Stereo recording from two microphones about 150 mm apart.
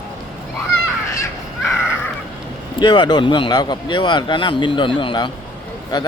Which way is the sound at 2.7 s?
30° left (ahead or behind).